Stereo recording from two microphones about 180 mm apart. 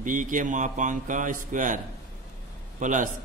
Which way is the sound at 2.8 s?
45° right (ahead or behind).